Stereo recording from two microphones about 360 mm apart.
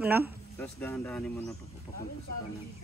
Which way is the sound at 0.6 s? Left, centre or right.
Centre.